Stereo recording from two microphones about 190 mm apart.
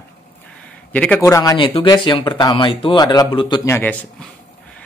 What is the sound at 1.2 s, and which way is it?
Speech, 15° left (ahead or behind).